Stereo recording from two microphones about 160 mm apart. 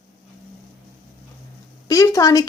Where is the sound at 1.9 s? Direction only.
20° left (ahead or behind).